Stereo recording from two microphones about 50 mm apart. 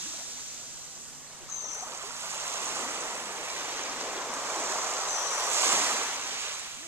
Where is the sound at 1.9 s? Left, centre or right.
Right.